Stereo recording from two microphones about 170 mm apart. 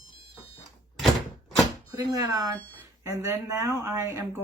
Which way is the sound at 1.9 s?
20° right (ahead or behind).